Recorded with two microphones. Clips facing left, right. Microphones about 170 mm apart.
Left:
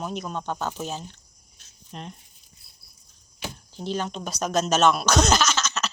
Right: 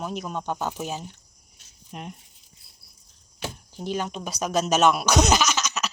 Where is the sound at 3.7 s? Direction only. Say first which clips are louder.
Even; 10° right (ahead or behind).